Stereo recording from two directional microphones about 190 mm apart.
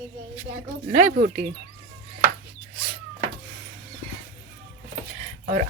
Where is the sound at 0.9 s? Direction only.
40° right (ahead or behind).